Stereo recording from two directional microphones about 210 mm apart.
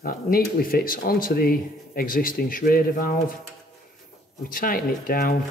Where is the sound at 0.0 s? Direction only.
45° left (ahead or behind).